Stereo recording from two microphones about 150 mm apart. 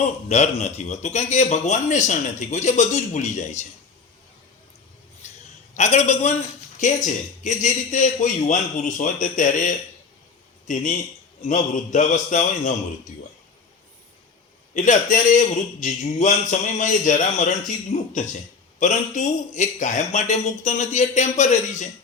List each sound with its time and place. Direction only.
0.0 s a man's voice: 45° left (ahead or behind)
5.2 s a sound: 50° left (ahead or behind)
5.7 s a man's voice: 50° left (ahead or behind)
11.4 s a man's voice: 55° left (ahead or behind)
14.7 s a man's voice: 60° left (ahead or behind)